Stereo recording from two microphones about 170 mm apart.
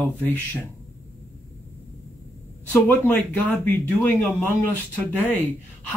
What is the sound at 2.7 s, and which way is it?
Speech, 10° left (ahead or behind).